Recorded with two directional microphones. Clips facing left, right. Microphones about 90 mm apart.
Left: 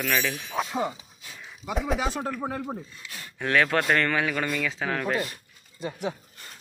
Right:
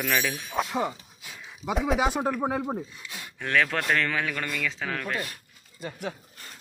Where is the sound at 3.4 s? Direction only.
5° left (ahead or behind).